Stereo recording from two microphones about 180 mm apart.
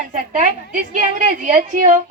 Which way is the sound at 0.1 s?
45° right (ahead or behind).